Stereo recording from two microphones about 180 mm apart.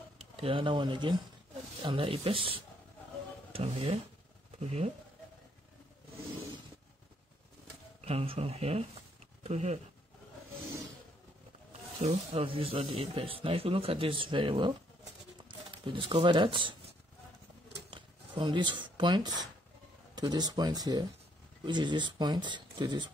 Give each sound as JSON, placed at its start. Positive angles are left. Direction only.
{"t": 0.2, "sound": "speech", "side_deg": -30}
{"t": 8.0, "sound": "speech", "side_deg": -35}
{"t": 12.0, "sound": "speech", "side_deg": -35}
{"t": 15.8, "sound": "speech", "side_deg": -30}
{"t": 17.8, "sound": "speech", "side_deg": -25}